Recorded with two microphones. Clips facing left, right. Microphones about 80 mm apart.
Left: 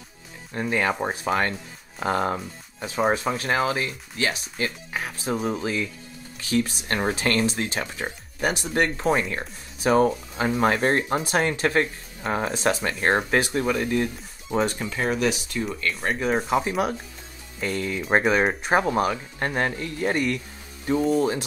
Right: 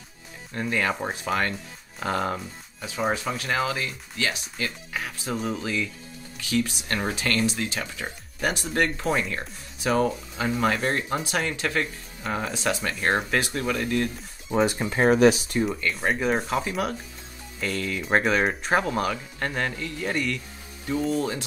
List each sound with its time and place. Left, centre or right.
0.5 s speech: left
8.4 s speech: centre
14.5 s speech: centre
14.8 s speech: right
15.6 s speech: centre
17.6 s speech: left